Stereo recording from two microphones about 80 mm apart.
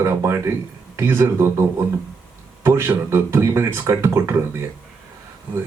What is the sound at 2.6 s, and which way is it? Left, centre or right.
A man's voice, right.